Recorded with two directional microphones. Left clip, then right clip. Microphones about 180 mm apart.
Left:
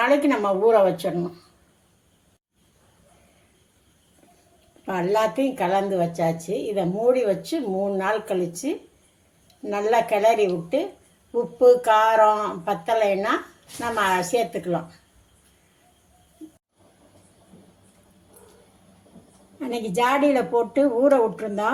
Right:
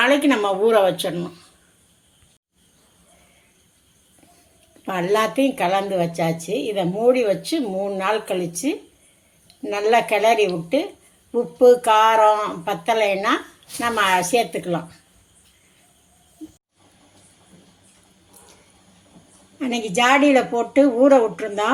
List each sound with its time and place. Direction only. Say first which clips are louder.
0.0 s a woman's voice: right 3 dB; 35° right (ahead or behind)
4.9 s a woman's voice: right 2 dB; 35° right (ahead or behind)
19.5 s a woman's voice: right 3 dB; 35° right (ahead or behind)